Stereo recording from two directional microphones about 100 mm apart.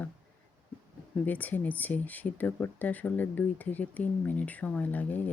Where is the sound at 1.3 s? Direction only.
15° left (ahead or behind).